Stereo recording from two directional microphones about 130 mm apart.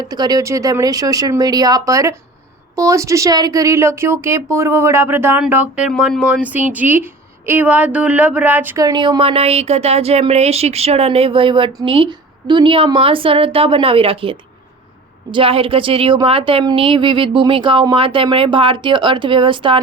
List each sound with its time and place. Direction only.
0.0 s a woman's voice: 30° right (ahead or behind); by 8.8 s 15° right (ahead or behind)
8.8 s a woman's voice: 35° right (ahead or behind)